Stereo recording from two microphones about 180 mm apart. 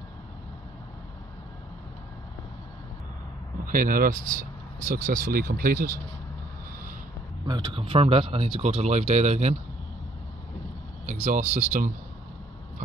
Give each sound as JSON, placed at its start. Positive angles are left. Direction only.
{"t": 3.6, "sound": "speech", "side_deg": -50}
{"t": 7.4, "sound": "speech", "side_deg": -25}
{"t": 11.1, "sound": "speech", "side_deg": -35}